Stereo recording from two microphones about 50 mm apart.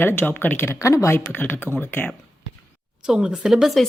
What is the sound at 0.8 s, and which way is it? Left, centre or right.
Speech, left.